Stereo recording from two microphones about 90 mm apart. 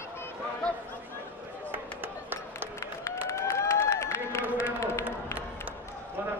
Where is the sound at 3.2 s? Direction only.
30° left (ahead or behind).